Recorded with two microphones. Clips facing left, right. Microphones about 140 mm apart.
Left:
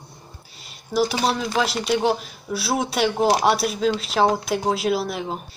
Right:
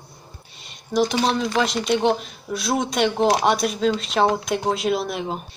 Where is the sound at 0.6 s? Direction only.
5° left (ahead or behind).